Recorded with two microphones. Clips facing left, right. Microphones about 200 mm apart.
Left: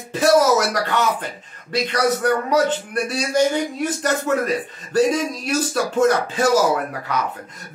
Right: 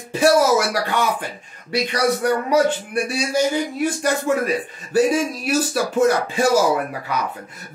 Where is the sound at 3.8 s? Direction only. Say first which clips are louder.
Right 1 dB; 10° right (ahead or behind).